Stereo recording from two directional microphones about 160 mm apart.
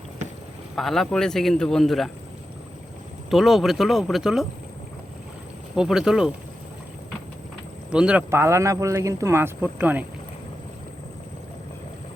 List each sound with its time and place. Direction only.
0.8 s speech: centre (ahead or behind)
3.2 s speech: centre (ahead or behind)
5.7 s speech: 5° right (ahead or behind)
7.9 s speech: 5° right (ahead or behind)